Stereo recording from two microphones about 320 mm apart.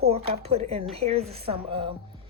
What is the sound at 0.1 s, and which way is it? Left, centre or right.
A woman's voice, centre.